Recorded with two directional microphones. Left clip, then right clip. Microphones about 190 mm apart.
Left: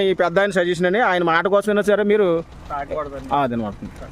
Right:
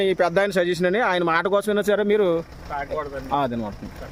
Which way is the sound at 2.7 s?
15° right (ahead or behind).